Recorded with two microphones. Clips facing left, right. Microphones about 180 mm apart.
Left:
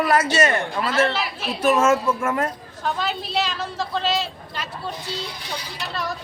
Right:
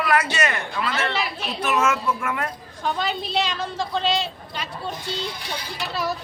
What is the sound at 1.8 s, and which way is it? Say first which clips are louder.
Speech: left 4 dB; 45° left (ahead or behind).